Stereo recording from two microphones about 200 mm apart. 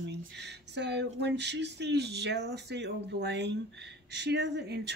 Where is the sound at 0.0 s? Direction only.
60° right (ahead or behind).